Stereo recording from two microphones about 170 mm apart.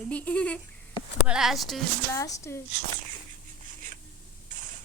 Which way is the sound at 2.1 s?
15° left (ahead or behind).